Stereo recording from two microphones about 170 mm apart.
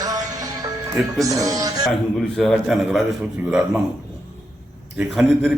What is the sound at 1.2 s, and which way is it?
Speech, 20° right (ahead or behind).